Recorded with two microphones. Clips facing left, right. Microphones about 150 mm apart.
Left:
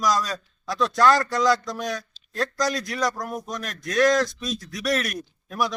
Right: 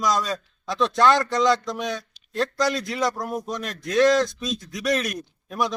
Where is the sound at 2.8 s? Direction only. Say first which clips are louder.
Right 1 dB; 25° right (ahead or behind).